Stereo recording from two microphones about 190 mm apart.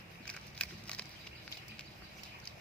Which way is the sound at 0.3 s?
5° left (ahead or behind).